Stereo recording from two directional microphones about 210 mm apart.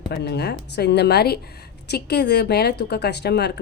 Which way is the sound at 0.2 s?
50° left (ahead or behind).